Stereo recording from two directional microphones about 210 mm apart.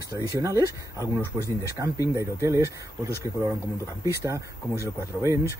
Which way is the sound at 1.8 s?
10° right (ahead or behind).